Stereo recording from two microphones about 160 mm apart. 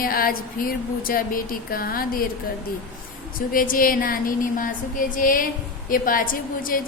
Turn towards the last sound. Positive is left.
turn(degrees=60)  # may be behind; listen again after turning